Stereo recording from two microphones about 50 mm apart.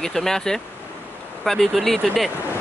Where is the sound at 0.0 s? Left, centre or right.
Centre.